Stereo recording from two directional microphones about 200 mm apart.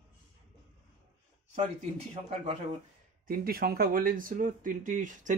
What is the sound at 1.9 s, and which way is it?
Speech, 30° right (ahead or behind).